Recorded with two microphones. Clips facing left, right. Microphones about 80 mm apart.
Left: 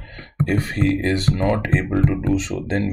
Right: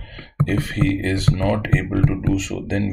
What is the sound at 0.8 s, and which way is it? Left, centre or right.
Speech, left.